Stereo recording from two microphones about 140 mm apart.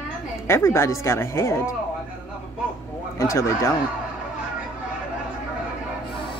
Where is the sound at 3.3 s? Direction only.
20° left (ahead or behind).